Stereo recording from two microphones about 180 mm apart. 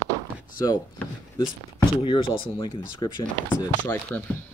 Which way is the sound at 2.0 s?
30° left (ahead or behind).